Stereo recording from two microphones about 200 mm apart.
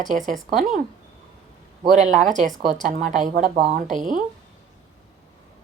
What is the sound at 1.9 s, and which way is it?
A woman's voice, 40° right (ahead or behind).